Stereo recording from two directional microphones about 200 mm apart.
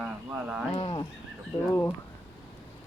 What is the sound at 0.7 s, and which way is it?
Speech, 25° left (ahead or behind).